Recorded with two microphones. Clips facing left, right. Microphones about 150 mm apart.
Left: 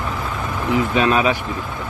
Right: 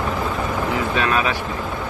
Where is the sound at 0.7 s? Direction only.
20° left (ahead or behind).